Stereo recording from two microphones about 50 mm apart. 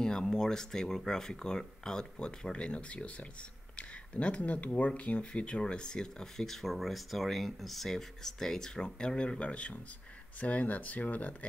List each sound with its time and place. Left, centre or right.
0.0 s speech: centre; by 11.3 s left